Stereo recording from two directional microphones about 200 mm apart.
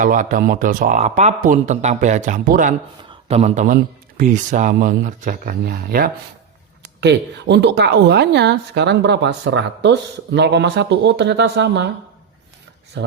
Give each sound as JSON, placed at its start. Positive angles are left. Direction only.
{"t": 0.0, "sound": "speech", "side_deg": -40}
{"t": 6.8, "sound": "a woman's voice", "side_deg": -60}
{"t": 12.9, "sound": "a woman's voice", "side_deg": -60}